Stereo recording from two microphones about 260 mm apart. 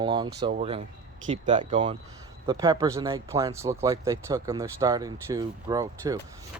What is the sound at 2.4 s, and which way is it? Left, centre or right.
Speech, centre.